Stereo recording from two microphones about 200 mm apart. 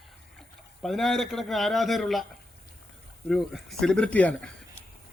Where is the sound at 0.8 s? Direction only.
Centre (ahead or behind).